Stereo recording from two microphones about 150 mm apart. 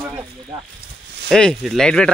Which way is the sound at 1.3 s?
5° left (ahead or behind).